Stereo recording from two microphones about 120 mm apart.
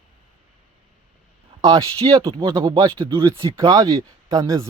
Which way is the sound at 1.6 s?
25° right (ahead or behind).